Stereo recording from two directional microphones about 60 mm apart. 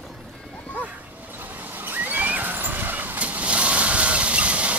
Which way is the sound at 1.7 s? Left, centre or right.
Right.